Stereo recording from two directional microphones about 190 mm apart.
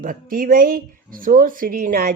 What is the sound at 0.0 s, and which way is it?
Speech, 45° right (ahead or behind).